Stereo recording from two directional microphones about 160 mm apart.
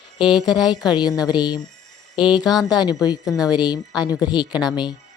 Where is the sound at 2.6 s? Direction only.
25° left (ahead or behind).